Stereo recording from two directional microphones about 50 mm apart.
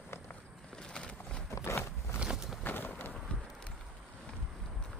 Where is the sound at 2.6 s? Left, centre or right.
Left.